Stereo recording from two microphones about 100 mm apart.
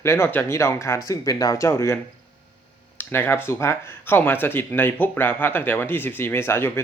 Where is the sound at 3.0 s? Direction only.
20° left (ahead or behind).